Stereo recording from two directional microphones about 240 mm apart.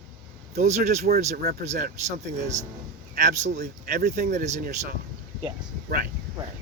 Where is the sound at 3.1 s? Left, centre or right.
Right.